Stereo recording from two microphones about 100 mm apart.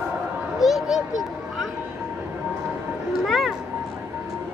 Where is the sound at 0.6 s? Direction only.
Centre (ahead or behind).